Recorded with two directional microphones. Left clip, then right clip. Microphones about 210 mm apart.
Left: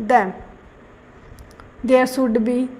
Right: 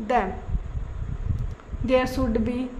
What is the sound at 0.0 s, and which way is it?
Speech, 25° left (ahead or behind).